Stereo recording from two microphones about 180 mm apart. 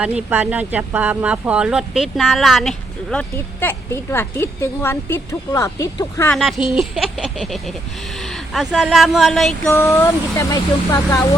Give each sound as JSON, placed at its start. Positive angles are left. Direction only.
{"t": 0.0, "sound": "speech", "side_deg": -5}
{"t": 6.7, "sound": "speech", "side_deg": 0}
{"t": 9.6, "sound": "speech", "side_deg": 15}